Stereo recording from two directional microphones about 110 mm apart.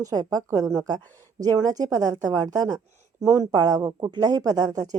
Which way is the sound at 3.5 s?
35° right (ahead or behind).